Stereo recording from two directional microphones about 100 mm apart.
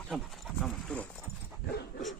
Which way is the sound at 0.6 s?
10° left (ahead or behind).